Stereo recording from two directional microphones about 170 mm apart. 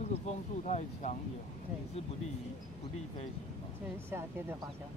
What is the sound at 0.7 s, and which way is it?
Speech, 45° left (ahead or behind).